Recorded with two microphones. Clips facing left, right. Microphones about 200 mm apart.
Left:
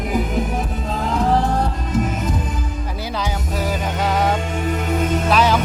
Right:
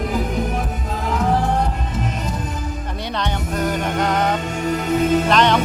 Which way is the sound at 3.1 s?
5° left (ahead or behind).